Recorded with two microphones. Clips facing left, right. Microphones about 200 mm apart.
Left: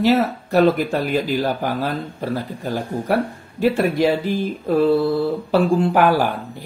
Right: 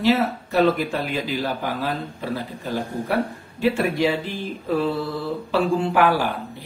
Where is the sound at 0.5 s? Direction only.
45° left (ahead or behind).